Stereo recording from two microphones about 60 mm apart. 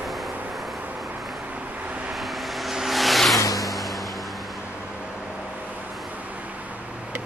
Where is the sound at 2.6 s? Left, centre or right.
Centre.